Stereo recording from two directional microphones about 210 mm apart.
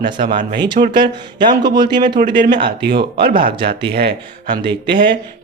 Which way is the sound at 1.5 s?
20° right (ahead or behind).